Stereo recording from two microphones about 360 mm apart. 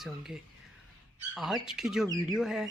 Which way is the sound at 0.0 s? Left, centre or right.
Centre.